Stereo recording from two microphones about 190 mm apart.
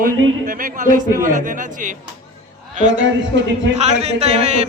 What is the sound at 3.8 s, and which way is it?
Speech, 35° right (ahead or behind).